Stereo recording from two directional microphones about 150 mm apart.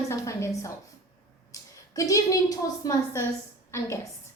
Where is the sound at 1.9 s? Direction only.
20° left (ahead or behind).